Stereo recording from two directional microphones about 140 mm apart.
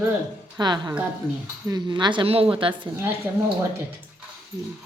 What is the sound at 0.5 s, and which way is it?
Speech, 30° right (ahead or behind).